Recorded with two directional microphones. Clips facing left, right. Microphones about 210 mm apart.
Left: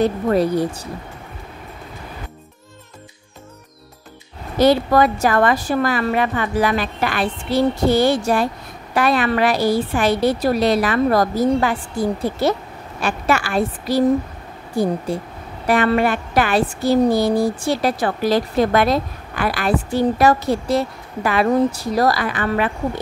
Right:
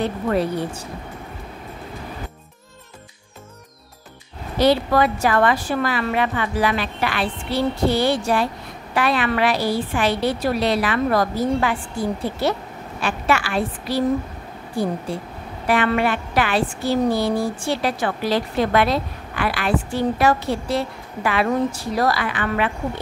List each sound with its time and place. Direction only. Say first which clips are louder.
0.0 s a woman's voice: left 4 dB; 40° left (ahead or behind)
4.6 s a woman's voice: left 3 dB; 45° left (ahead or behind)
15.6 s a woman's voice: left 3 dB; 40° left (ahead or behind)